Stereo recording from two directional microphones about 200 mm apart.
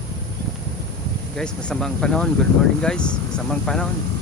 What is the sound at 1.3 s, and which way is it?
Speech, 5° left (ahead or behind).